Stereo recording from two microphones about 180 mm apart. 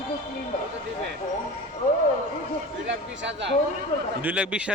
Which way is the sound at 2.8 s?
80° right.